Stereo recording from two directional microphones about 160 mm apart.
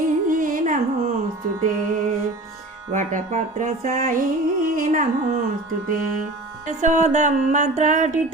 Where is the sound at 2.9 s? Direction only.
50° right (ahead or behind).